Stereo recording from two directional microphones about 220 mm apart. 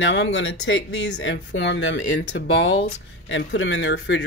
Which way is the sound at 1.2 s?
55° left (ahead or behind).